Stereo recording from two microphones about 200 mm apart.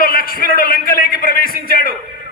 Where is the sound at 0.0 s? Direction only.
45° left (ahead or behind).